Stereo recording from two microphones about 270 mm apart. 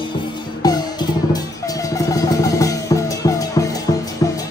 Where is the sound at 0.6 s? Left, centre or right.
Centre.